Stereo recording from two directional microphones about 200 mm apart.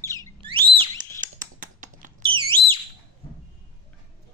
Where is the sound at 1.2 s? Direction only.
40° right (ahead or behind).